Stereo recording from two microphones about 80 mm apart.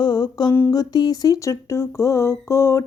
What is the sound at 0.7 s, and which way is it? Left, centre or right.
Speech, left.